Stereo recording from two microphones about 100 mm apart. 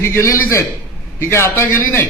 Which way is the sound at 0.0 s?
25° left (ahead or behind).